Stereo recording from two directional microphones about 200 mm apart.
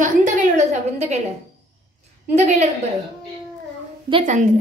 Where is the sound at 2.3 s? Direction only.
35° right (ahead or behind).